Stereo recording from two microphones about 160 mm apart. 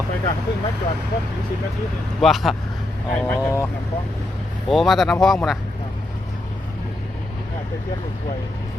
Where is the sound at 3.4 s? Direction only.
20° left (ahead or behind).